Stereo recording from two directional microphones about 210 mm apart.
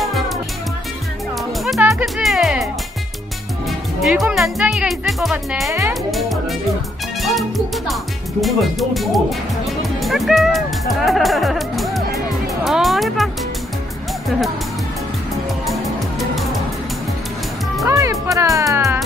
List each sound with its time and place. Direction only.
0.0 s music: centre (ahead or behind)
1.6 s music: centre (ahead or behind)
6.1 s music: centre (ahead or behind)
11.1 s speech: centre (ahead or behind)
12.6 s music: centre (ahead or behind)
17.8 s music: 15° right (ahead or behind)